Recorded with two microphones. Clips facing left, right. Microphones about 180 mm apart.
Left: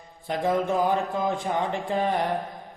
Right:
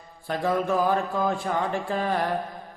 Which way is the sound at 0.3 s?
20° left (ahead or behind).